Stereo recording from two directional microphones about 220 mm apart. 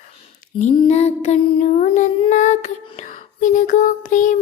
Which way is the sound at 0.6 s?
30° left (ahead or behind).